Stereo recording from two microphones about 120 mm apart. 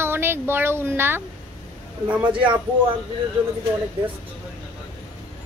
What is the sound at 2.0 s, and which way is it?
Speech, 10° right (ahead or behind).